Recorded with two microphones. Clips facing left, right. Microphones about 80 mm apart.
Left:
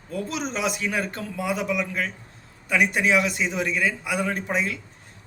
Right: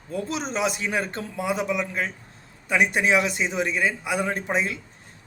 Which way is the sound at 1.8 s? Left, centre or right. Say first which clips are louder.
Even; right.